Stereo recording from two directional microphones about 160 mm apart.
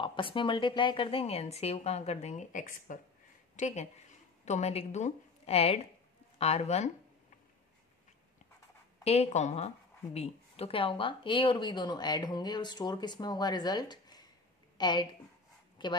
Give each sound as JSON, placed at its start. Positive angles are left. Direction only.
{"t": 0.0, "sound": "a woman's voice", "side_deg": 30}
{"t": 9.0, "sound": "a woman's voice", "side_deg": 40}